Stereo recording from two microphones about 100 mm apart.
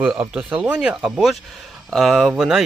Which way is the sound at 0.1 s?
5° right (ahead or behind).